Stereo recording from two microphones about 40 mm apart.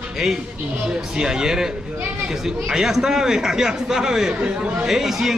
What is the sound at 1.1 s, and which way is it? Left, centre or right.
A man's voice, centre.